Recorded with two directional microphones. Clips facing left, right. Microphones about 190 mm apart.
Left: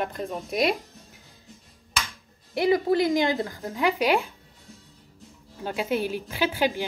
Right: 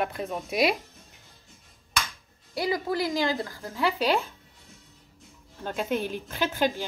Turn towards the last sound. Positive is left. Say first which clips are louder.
# left 2 dB
turn(degrees=10)  # may be behind; listen again after turning